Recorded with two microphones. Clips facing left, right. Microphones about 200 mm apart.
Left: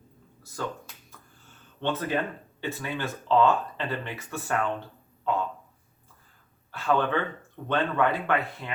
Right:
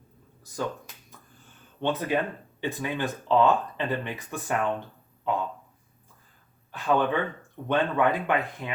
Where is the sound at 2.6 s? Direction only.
15° right (ahead or behind).